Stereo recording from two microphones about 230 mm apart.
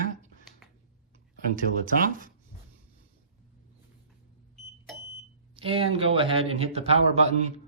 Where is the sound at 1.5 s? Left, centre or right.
Right.